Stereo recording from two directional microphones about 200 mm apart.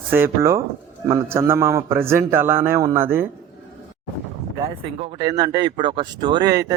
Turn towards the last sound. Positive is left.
turn(degrees=-20)  # may be behind; listen again after turning